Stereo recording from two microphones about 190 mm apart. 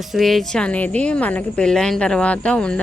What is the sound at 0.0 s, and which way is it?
Speech, centre (ahead or behind).